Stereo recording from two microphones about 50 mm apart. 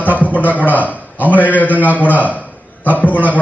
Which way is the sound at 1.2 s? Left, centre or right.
Right.